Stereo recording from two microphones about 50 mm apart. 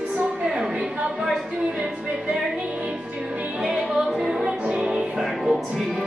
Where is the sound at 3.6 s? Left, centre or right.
Centre.